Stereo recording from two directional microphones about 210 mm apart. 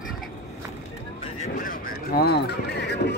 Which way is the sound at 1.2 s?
35° left (ahead or behind).